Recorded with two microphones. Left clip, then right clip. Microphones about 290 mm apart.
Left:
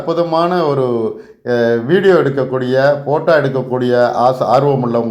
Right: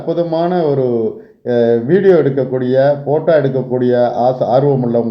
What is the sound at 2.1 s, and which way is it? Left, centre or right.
Speech, left.